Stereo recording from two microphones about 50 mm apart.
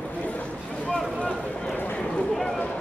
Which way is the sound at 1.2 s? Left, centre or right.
Left.